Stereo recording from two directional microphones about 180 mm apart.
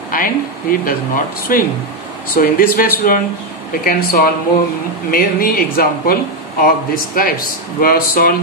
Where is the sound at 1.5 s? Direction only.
50° left (ahead or behind).